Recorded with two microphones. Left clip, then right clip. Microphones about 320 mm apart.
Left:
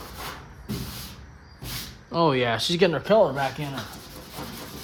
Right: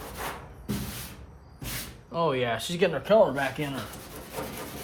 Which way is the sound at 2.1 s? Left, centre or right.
Left.